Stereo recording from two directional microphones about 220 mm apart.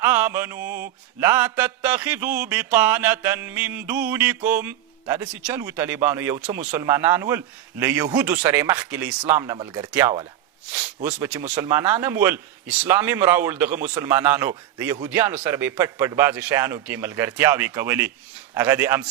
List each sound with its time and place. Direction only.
0.0 s mantra: 10° right (ahead or behind)
9.4 s speech: 20° right (ahead or behind)
9.9 s mantra: 15° right (ahead or behind)